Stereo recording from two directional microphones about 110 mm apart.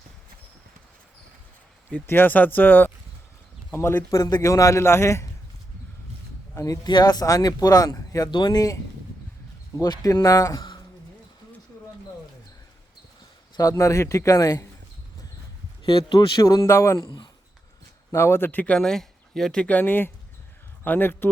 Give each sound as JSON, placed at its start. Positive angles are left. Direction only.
{"t": 1.9, "sound": "a man's voice", "side_deg": 20}
{"t": 6.5, "sound": "a sound", "side_deg": 30}
{"t": 6.8, "sound": "speech", "side_deg": 40}
{"t": 8.3, "sound": "speech", "side_deg": 45}
{"t": 13.6, "sound": "a man's voice", "side_deg": 30}
{"t": 15.9, "sound": "speech", "side_deg": 50}
{"t": 16.4, "sound": "a man's voice", "side_deg": 30}
{"t": 18.1, "sound": "speech", "side_deg": 25}